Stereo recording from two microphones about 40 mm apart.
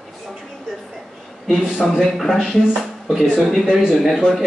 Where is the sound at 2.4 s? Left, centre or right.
Centre.